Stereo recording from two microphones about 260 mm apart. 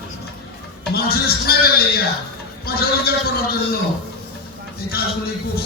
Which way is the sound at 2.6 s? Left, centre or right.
Left.